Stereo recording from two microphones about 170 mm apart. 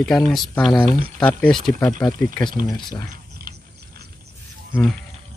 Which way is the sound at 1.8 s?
25° left (ahead or behind).